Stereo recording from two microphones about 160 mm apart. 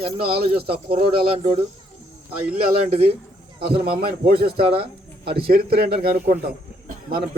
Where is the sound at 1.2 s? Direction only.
35° right (ahead or behind).